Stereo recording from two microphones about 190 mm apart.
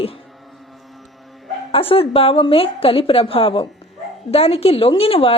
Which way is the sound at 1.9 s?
30° left (ahead or behind).